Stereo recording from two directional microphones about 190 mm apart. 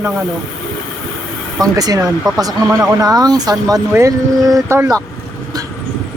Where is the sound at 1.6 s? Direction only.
20° right (ahead or behind).